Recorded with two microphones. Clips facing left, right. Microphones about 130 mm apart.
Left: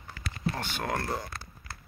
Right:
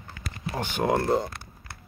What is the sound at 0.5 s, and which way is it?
Speech, 15° right (ahead or behind).